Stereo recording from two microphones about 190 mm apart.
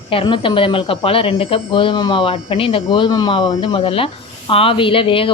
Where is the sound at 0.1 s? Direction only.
30° left (ahead or behind).